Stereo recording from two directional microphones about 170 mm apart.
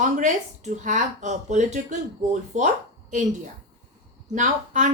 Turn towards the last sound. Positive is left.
turn(degrees=-45)  # may be behind; listen again after turning